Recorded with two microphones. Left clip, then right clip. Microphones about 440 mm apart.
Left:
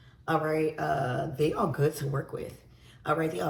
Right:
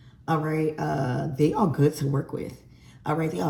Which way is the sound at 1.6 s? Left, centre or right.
Centre.